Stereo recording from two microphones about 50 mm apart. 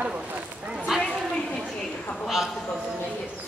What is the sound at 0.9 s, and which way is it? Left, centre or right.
Children playing, centre.